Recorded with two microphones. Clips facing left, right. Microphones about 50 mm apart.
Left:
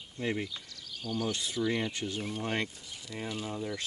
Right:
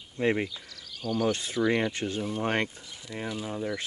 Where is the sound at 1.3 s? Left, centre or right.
Right.